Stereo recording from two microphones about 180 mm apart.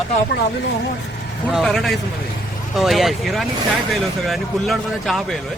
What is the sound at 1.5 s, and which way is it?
Speech, centre (ahead or behind).